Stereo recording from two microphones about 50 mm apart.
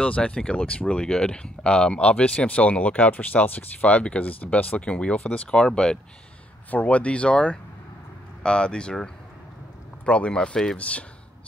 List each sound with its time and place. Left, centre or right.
0.0 s speech: centre
4.3 s speech: left
5.6 s speech: centre
6.7 s speech: left; by 10.8 s centre
10.8 s speech: left